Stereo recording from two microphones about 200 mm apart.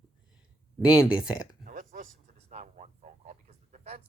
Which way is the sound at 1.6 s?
40° right (ahead or behind).